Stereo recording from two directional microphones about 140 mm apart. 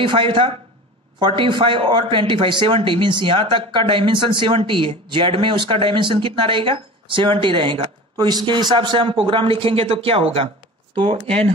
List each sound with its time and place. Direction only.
0.0 s speech: 35° right (ahead or behind)